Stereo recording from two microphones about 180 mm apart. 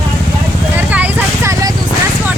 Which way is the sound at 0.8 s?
10° right (ahead or behind).